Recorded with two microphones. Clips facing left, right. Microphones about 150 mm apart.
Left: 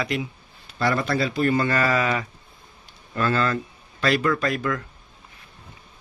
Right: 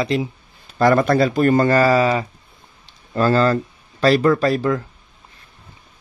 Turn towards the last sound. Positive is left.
turn(degrees=-30)  # may be behind; listen again after turning